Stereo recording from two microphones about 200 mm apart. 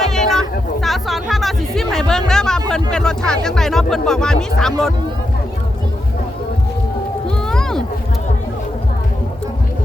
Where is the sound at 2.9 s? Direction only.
5° left (ahead or behind).